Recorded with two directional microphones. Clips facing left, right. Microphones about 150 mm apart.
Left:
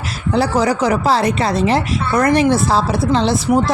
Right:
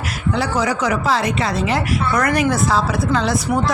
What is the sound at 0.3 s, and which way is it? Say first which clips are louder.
Speech: left 5 dB; 35° left (ahead or behind).